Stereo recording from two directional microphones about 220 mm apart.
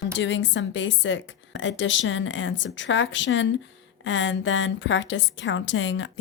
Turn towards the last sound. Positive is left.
turn(degrees=60)  # may be behind; listen again after turning